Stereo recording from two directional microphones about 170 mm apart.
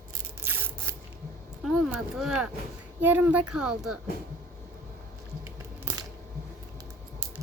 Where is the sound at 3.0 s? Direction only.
10° right (ahead or behind).